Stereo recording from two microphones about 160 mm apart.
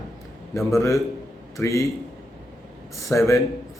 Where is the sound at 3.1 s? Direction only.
20° left (ahead or behind).